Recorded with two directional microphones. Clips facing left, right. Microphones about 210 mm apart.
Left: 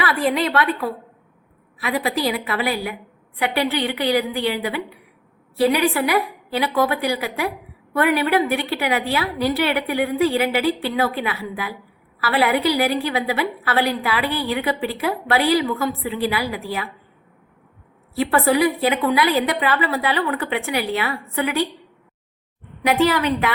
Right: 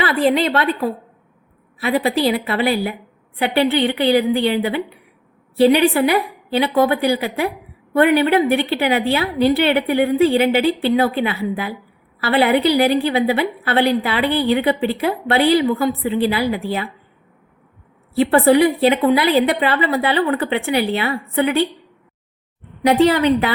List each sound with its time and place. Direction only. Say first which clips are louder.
0.0 s a woman's voice: right 4 dB; 25° right (ahead or behind)
18.1 s a woman's voice: right 5 dB; 30° right (ahead or behind)
22.9 s a woman's voice: right 5 dB; 30° right (ahead or behind)